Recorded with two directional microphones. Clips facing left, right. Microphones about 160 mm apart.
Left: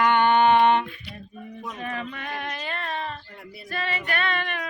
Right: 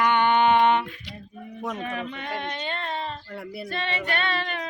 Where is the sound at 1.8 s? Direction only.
15° right (ahead or behind).